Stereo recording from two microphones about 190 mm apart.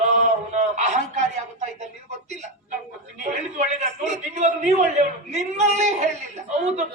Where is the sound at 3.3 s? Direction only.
35° right (ahead or behind).